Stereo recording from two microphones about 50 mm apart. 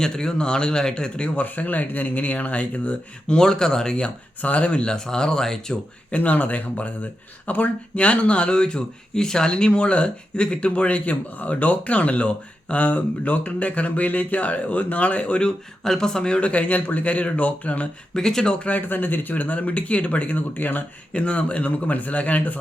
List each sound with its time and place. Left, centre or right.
0.0 s speech: centre
1.5 s speech: left
3.3 s speech: centre
4.4 s speech: left
4.9 s speech: centre
6.1 s speech: left
18.1 s speech: centre
18.9 s speech: left
21.1 s speech: left